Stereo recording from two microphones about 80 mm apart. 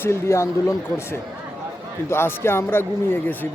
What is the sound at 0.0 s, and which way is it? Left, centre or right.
Speech, left.